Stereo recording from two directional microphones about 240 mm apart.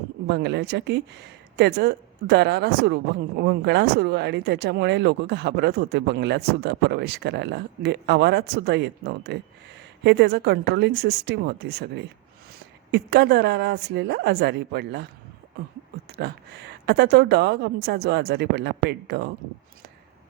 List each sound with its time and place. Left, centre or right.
0.3 s speech: right